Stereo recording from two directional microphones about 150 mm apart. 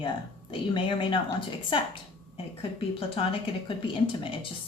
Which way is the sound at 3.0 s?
40° left (ahead or behind).